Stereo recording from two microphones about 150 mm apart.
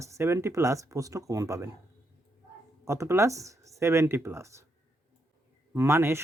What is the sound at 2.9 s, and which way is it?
Speech, 20° right (ahead or behind).